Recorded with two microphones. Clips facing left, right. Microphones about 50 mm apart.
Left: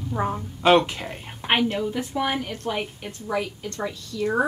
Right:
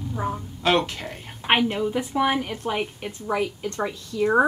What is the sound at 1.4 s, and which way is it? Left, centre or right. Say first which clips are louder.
A woman's voice: right 1 dB; centre.